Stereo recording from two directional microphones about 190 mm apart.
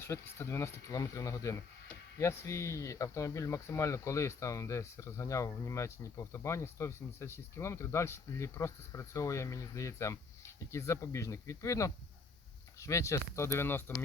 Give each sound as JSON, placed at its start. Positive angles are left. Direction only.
{"t": 0.0, "sound": "speech", "side_deg": 15}